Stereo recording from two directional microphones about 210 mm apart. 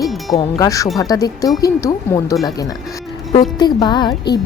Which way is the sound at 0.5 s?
15° left (ahead or behind).